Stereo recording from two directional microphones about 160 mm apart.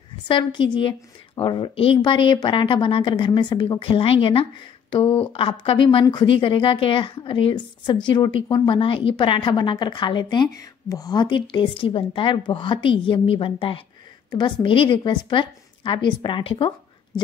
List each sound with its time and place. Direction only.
0.3 s a woman's voice: 30° left (ahead or behind)